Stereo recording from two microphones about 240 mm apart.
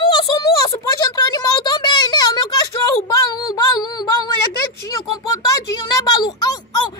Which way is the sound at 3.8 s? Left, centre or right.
Centre.